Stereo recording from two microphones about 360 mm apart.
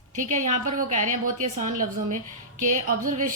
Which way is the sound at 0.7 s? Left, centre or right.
Centre.